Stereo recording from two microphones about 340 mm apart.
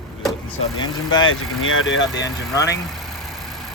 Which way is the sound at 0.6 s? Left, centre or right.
Centre.